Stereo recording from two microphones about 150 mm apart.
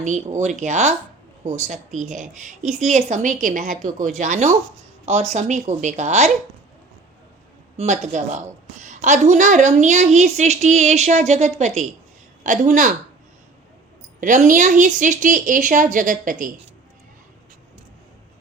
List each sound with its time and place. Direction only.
0.0 s a woman's voice: 55° right (ahead or behind)
7.8 s a woman's voice: 50° right (ahead or behind)
14.2 s a woman's voice: 60° right (ahead or behind)